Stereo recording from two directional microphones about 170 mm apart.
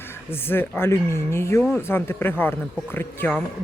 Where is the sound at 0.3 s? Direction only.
15° left (ahead or behind).